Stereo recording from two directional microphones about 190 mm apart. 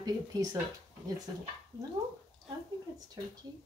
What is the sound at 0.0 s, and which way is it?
Speech, 20° right (ahead or behind).